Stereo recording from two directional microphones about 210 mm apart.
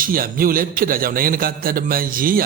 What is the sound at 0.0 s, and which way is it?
A man's voice, 45° right (ahead or behind).